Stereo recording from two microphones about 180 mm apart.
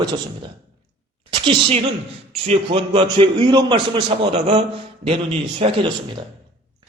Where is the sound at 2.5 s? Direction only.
30° right (ahead or behind).